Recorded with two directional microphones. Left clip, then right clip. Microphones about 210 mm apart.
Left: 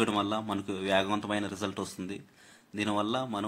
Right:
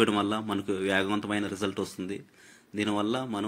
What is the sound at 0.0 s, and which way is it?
A man's voice, 5° right (ahead or behind).